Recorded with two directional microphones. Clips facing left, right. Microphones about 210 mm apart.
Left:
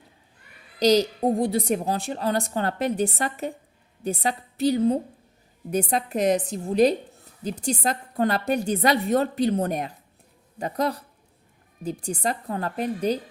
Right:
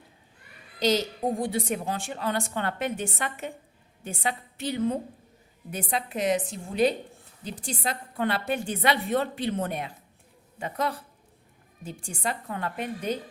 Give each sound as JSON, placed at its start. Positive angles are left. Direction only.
{"t": 0.8, "sound": "a woman's voice", "side_deg": 40}